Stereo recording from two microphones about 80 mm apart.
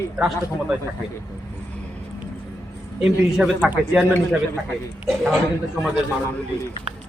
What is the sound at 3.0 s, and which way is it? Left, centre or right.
Speech, centre.